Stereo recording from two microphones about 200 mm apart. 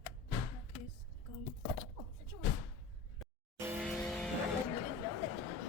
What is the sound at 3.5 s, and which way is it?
Vehicle, 10° right (ahead or behind).